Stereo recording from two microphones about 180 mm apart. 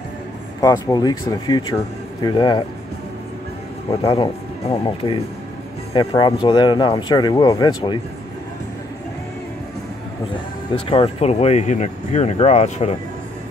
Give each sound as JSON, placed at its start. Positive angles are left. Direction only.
{"t": 0.6, "sound": "speech", "side_deg": 20}
{"t": 4.1, "sound": "speech", "side_deg": 30}
{"t": 10.9, "sound": "speech", "side_deg": 35}